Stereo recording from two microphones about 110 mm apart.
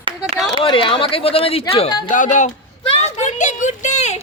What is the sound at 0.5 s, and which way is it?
Speech, 50° left (ahead or behind).